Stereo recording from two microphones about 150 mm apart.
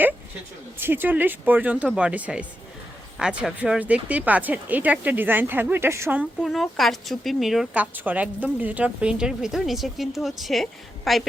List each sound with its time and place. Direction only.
0.8 s speech: 15° right (ahead or behind)
6.4 s speech: centre (ahead or behind)